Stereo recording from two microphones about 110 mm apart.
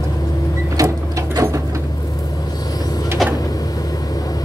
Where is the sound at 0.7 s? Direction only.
30° right (ahead or behind).